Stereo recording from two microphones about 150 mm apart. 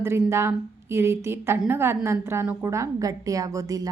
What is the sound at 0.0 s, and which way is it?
A woman's voice, 15° right (ahead or behind).